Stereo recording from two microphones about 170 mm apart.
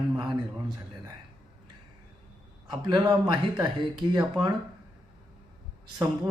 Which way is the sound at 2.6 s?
25° right (ahead or behind).